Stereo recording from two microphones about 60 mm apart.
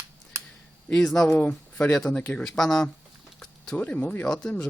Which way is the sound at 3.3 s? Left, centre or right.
Centre.